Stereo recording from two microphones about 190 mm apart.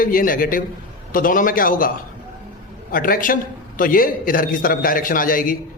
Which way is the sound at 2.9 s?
45° left (ahead or behind).